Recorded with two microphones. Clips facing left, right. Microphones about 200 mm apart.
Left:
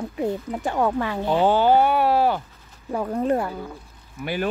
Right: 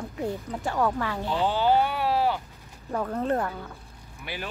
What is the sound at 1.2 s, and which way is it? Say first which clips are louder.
Speech: left 7 dB; 55° left (ahead or behind).